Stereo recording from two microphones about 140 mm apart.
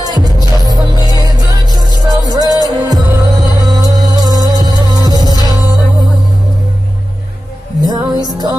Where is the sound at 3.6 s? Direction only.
25° right (ahead or behind).